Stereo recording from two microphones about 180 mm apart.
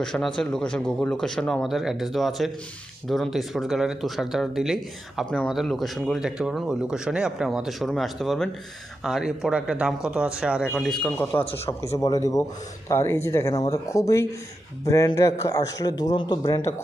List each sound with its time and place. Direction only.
0.0 s speech: 5° left (ahead or behind)
11.9 s a man's voice: 20° left (ahead or behind)